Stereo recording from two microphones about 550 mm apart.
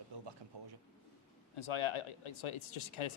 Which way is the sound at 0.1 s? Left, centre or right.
Right.